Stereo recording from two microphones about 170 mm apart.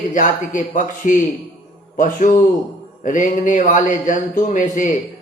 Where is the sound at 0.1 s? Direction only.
50° left (ahead or behind).